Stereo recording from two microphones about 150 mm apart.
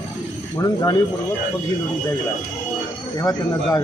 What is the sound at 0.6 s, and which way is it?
Speech, 25° left (ahead or behind).